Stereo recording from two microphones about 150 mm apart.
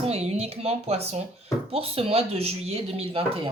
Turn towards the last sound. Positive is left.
turn(degrees=-40)  # may be behind; listen again after turning